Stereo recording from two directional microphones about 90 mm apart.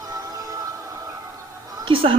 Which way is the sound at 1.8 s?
80° right.